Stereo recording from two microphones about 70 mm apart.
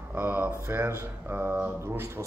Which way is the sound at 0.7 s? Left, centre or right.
Right.